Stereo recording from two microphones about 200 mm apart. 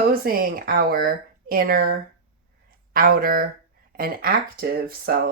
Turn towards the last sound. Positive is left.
turn(degrees=-50)  # may be behind; listen again after turning